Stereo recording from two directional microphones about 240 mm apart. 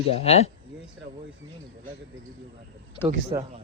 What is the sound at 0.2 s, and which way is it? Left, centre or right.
Speech, left.